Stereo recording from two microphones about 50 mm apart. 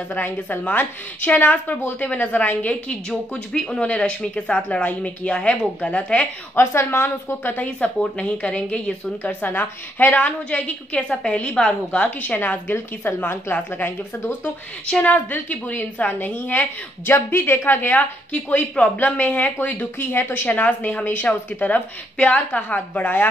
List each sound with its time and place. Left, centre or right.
0.1 s speech: left
3.1 s speech: centre
6.5 s a woman's voice: left
8.0 s speech: left
9.4 s a woman's voice: left; by 12.0 s centre
12.0 s a woman's voice: left
15.0 s speech: left
17.1 s a woman's voice: left
18.3 s speech: left